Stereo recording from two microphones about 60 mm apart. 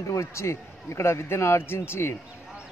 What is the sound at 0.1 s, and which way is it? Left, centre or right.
A man's voice, left.